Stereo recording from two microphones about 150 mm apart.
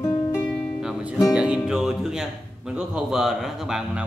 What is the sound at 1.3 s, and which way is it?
Speech, 5° right (ahead or behind).